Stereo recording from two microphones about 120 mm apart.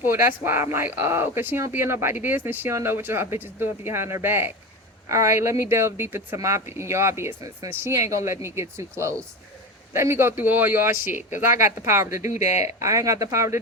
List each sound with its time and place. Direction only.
0.0 s speech: 20° right (ahead or behind)